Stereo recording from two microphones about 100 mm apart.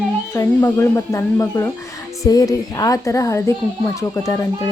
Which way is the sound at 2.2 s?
35° left (ahead or behind).